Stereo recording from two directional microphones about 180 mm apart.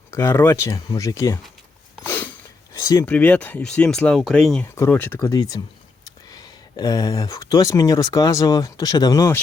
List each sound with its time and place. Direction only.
0.1 s speech: 15° left (ahead or behind)
2.0 s a sound: 10° left (ahead or behind)
2.8 s speech: 20° left (ahead or behind)
3.1 s speech: 5° left (ahead or behind)
5.2 s speech: 20° left (ahead or behind)